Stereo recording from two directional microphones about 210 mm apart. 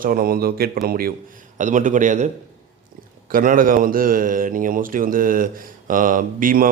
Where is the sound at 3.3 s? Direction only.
40° right (ahead or behind).